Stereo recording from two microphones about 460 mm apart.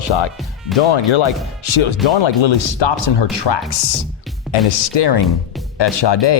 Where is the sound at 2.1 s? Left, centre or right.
Left.